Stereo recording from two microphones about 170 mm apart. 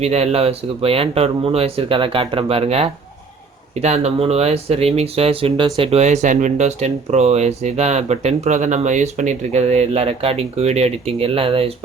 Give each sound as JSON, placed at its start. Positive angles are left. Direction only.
{"t": 0.0, "sound": "speech", "side_deg": -40}